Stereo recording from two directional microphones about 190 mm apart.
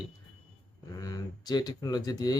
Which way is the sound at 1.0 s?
20° left (ahead or behind).